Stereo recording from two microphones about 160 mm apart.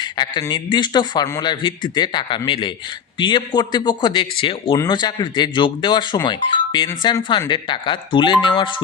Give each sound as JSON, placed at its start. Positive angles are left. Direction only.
{"t": 0.0, "sound": "a man's voice", "side_deg": 25}